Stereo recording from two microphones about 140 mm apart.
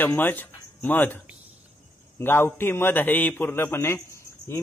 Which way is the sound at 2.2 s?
15° left (ahead or behind).